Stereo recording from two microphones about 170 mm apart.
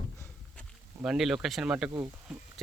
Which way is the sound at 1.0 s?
5° right (ahead or behind).